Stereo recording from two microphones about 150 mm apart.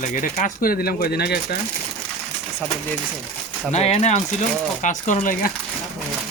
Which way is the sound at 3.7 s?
45° left (ahead or behind).